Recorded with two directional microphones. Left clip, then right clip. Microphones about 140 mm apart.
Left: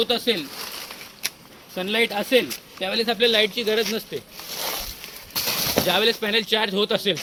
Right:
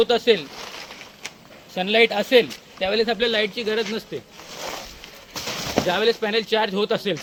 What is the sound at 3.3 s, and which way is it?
Speech, 15° right (ahead or behind).